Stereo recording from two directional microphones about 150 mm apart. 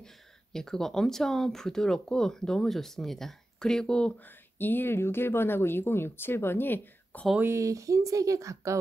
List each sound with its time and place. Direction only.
0.0 s speech: 5° left (ahead or behind)
7.4 s speech: 20° right (ahead or behind)